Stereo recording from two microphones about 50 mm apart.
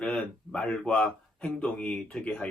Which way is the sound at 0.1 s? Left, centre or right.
Left.